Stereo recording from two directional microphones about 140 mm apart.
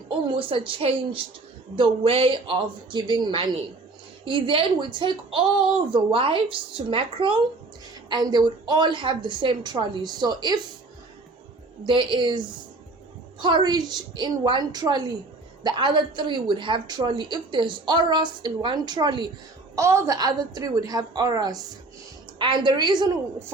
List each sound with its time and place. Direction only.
0.3 s speech: 40° right (ahead or behind)
11.8 s speech: 35° right (ahead or behind)
19.7 s a woman's voice: 20° right (ahead or behind)